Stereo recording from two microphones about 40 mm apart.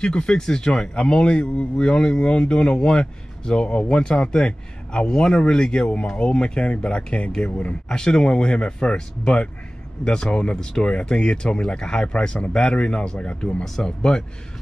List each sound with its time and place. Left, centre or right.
0.0 s speech: left
7.9 s speech: centre